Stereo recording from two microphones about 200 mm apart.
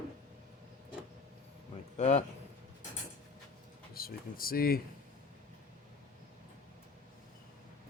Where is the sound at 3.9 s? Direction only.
50° left (ahead or behind).